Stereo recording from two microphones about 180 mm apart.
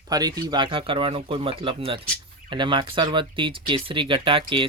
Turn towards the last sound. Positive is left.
turn(degrees=-30)  # may be behind; listen again after turning